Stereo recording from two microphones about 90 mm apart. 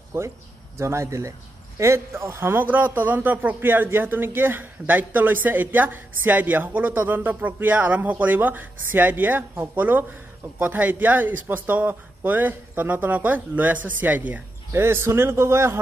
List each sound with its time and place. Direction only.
0.1 s speech: 25° right (ahead or behind)